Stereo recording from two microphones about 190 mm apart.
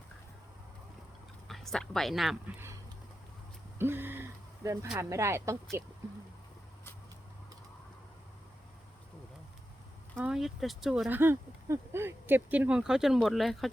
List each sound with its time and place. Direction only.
1.5 s speech: centre (ahead or behind)
3.8 s a sound: 10° right (ahead or behind)
4.9 s speech: 15° right (ahead or behind)
10.2 s speech: 5° right (ahead or behind)
11.2 s speech: 10° right (ahead or behind)